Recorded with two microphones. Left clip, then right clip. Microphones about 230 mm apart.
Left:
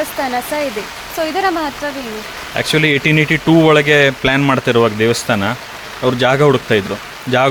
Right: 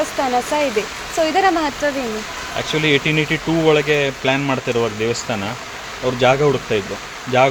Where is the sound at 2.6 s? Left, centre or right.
Left.